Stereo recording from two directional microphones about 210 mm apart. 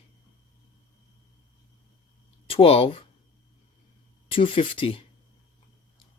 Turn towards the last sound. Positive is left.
turn(degrees=25)  # may be behind; listen again after turning